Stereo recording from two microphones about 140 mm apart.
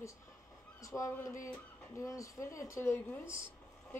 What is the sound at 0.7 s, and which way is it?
A woman's voice, 25° left (ahead or behind).